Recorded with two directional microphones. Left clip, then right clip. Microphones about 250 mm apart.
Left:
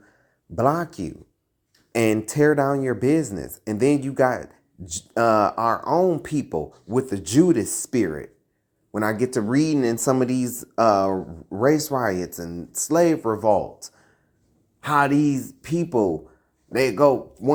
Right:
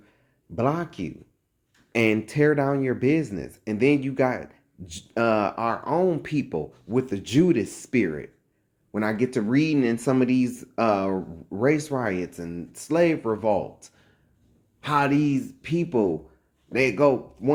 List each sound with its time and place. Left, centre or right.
0.5 s speech: centre
11.6 s speech: centre
12.0 s speech: centre
14.8 s speech: centre